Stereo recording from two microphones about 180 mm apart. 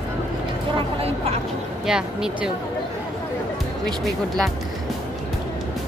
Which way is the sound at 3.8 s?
Centre (ahead or behind).